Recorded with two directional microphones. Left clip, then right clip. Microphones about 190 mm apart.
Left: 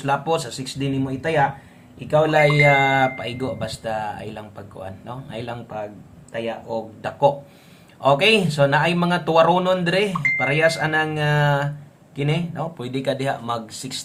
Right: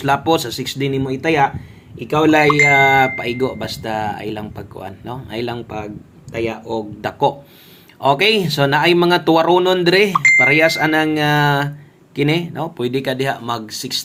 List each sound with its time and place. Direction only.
0.0 s speech: 35° right (ahead or behind)